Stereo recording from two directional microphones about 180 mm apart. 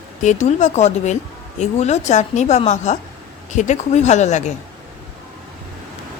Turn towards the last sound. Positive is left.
turn(degrees=40)  # may be behind; listen again after turning